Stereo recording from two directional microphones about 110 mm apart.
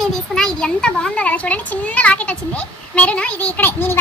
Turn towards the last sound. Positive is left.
turn(degrees=20)  # may be behind; listen again after turning